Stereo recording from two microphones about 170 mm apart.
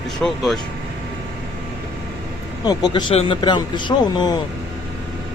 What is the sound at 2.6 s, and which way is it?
Speech, 25° left (ahead or behind).